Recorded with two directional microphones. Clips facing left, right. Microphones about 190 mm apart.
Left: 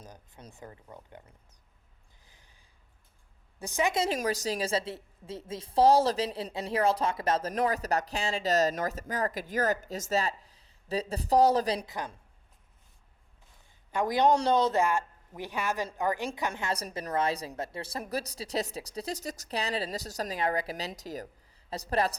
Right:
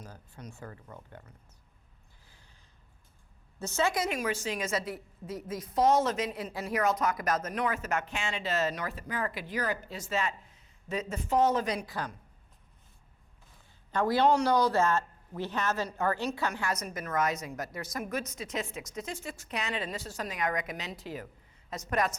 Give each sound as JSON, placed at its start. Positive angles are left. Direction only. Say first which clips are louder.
{"t": 0.0, "sound": "a man's voice", "louder": "right 2 dB", "side_deg": 15}
{"t": 2.2, "sound": "a sound", "louder": "right 1 dB", "side_deg": 15}
{"t": 3.6, "sound": "a man's voice", "louder": "even", "side_deg": 15}
{"t": 3.9, "sound": "a woman's voice", "louder": "left 3 dB", "side_deg": 30}
{"t": 4.2, "sound": "speech", "louder": "left 2 dB", "side_deg": 40}
{"t": 11.9, "sound": "a man's voice", "louder": "even", "side_deg": 15}
{"t": 13.9, "sound": "a man's voice", "louder": "even", "side_deg": 15}
{"t": 16.5, "sound": "speech", "louder": "even", "side_deg": 25}